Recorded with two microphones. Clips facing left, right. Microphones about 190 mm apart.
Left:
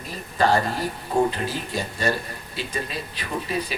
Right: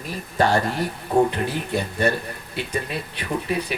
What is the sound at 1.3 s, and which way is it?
Speech, 60° right (ahead or behind).